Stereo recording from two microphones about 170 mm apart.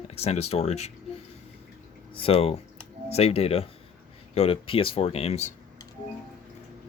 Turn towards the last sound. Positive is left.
turn(degrees=40)  # may be behind; listen again after turning